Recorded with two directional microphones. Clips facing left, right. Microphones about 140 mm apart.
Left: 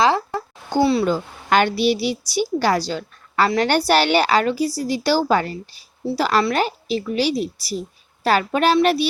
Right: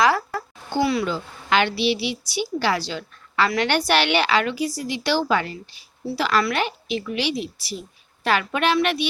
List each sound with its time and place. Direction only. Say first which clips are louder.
0.0 s a sound: left 2 dB; 25° left (ahead or behind)
0.8 s speech: left 4 dB; 30° left (ahead or behind)
1.0 s a woman's voice: left 6 dB; 45° left (ahead or behind)